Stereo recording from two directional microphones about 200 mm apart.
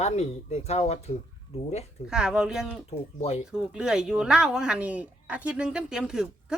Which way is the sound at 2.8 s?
30° left (ahead or behind).